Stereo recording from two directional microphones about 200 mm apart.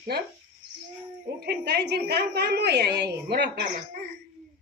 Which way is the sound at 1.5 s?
55° right (ahead or behind).